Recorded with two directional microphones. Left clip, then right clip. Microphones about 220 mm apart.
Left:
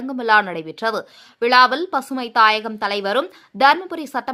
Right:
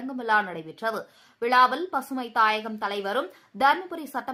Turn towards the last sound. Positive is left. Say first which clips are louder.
# left 7 dB
turn(degrees=35)  # may be behind; listen again after turning